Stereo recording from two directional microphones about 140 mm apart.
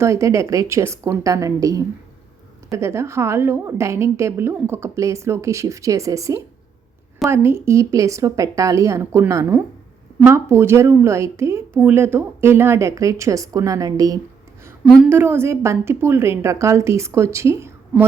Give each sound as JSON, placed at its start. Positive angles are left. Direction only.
{"t": 0.0, "sound": "a woman's voice", "side_deg": -20}
{"t": 14.8, "sound": "a woman's voice", "side_deg": 0}
{"t": 15.1, "sound": "a woman's voice", "side_deg": -15}